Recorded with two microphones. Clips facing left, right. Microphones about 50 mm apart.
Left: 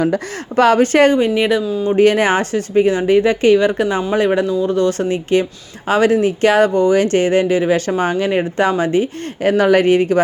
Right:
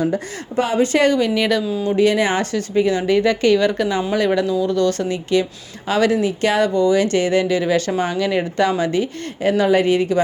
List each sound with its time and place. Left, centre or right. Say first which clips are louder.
0.0 s speech: left 3 dB; left
0.8 s speech: left 4 dB; left
1.1 s speech: left 3 dB; left
2.0 s speech: left 4 dB; left
9.4 s speech: left 3 dB; left